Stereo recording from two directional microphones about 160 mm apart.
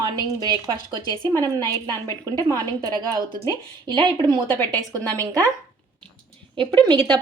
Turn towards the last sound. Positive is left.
turn(degrees=-25)  # may be behind; listen again after turning